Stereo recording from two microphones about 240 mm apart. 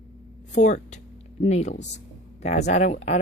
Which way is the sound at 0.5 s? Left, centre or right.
Left.